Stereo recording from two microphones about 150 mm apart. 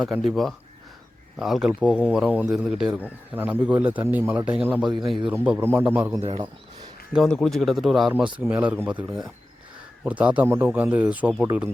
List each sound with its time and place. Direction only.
0.3 s a man's voice: centre (ahead or behind)
5.3 s a man's voice: 15° right (ahead or behind)
6.2 s speech: 30° right (ahead or behind)
7.1 s a man's voice: centre (ahead or behind)